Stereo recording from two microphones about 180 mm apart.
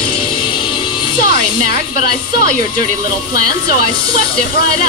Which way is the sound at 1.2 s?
55° left (ahead or behind).